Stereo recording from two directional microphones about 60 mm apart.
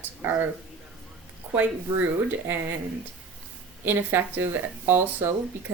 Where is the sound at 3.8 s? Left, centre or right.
Right.